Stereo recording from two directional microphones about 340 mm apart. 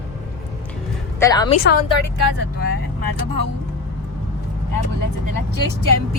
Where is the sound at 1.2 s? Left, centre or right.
Centre.